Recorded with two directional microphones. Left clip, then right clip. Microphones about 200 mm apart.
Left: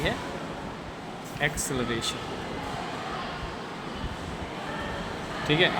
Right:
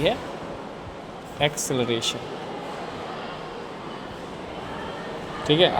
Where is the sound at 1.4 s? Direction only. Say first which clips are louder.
Right 5 dB; 15° right (ahead or behind).